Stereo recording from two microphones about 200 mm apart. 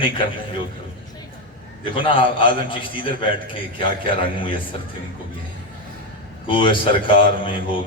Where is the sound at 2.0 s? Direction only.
25° left (ahead or behind).